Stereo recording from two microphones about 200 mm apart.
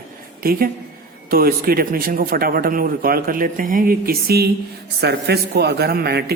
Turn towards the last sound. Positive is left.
turn(degrees=-50)  # may be behind; listen again after turning